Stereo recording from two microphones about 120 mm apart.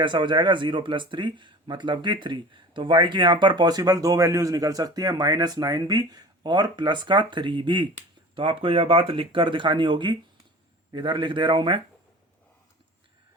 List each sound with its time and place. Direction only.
0.0 s speech: 40° right (ahead or behind)